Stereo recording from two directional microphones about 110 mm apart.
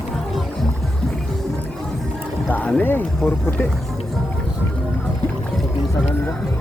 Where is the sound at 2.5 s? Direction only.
15° left (ahead or behind).